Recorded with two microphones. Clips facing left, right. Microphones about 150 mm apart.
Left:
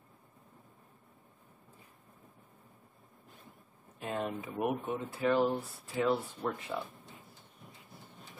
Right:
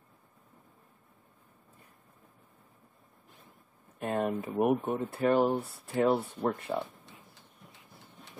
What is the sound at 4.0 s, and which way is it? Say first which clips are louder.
Speech: right 5 dB; 50° right (ahead or behind).